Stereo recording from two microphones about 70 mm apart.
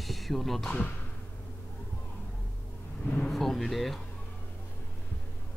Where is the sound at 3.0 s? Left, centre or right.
Left.